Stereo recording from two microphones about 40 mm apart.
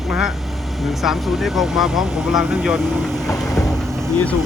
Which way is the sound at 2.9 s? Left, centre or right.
Centre.